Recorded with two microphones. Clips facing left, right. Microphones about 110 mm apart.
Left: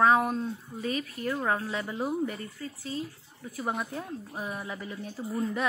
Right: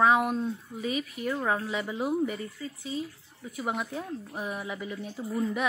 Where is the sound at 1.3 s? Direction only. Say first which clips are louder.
Even; centre (ahead or behind).